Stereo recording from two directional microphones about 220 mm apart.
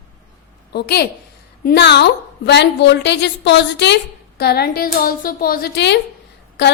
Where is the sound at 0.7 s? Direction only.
50° left (ahead or behind).